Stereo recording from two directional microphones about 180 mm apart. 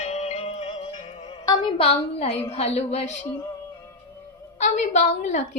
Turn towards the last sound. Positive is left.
turn(degrees=40)  # may be behind; listen again after turning